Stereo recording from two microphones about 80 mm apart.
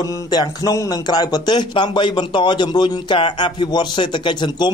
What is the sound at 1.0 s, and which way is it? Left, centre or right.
A man's voice, left.